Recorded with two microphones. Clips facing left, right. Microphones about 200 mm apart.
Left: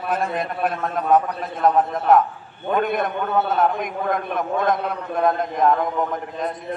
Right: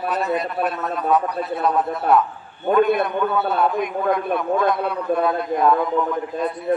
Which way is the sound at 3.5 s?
45° left (ahead or behind).